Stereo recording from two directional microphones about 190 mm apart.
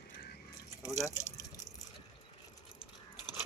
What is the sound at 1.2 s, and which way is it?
Water, 20° left (ahead or behind).